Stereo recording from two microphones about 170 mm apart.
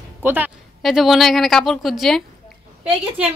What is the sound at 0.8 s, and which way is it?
A woman's voice, centre (ahead or behind).